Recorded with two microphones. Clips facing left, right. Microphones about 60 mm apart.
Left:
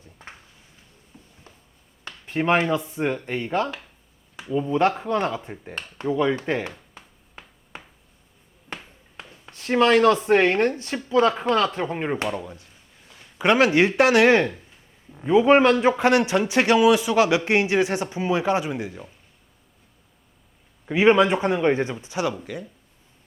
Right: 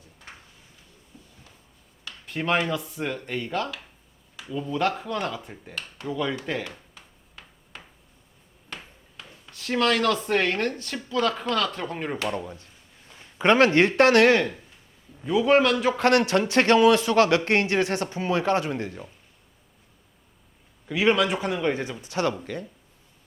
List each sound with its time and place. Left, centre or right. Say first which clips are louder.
0.2 s a sound: left 2 dB; left
2.0 s speech: left 5 dB; left
8.7 s a sound: left 3 dB; left
9.5 s speech: left 5 dB; left
12.3 s speech: left 1 dB; centre
14.3 s speech: left 2 dB; left
16.0 s speech: left 1 dB; centre
20.8 s speech: left 5 dB; left
22.1 s speech: even; centre